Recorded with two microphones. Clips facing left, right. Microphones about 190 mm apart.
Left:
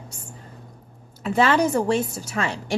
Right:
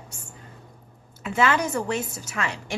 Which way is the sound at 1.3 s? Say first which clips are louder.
Left 4 dB; 35° left (ahead or behind).